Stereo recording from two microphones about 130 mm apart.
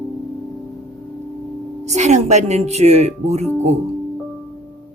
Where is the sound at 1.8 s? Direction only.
65° right (ahead or behind).